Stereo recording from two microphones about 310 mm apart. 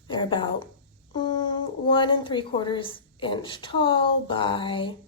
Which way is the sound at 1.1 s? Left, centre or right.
Centre.